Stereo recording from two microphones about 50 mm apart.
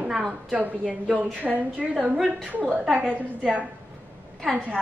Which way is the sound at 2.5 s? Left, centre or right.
Right.